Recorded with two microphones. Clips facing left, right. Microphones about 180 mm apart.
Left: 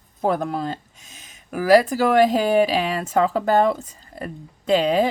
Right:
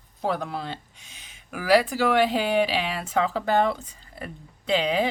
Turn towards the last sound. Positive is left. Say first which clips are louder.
# left 5 dB
turn(degrees=45)  # may be behind; listen again after turning